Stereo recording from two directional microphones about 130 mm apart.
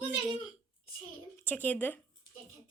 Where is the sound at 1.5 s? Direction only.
15° left (ahead or behind).